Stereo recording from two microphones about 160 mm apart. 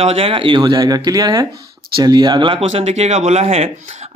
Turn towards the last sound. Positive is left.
turn(degrees=-40)  # may be behind; listen again after turning